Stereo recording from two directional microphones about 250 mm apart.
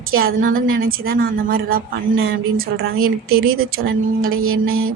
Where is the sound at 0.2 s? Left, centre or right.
Right.